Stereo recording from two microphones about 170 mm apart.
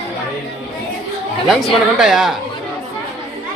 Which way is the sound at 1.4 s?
Centre (ahead or behind).